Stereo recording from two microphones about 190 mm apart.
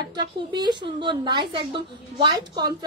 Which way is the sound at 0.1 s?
20° right (ahead or behind).